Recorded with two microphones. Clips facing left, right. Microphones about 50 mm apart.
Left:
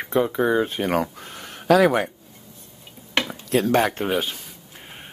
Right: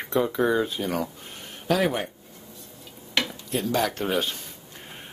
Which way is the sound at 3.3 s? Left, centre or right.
Left.